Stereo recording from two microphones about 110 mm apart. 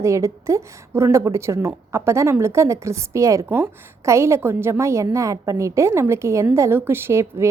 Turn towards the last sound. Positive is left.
turn(degrees=-25)  # may be behind; listen again after turning